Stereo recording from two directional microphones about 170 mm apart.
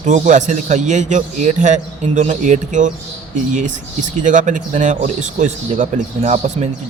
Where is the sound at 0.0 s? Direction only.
45° right (ahead or behind).